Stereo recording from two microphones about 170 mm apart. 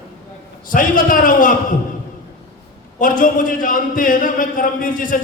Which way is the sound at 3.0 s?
50° left (ahead or behind).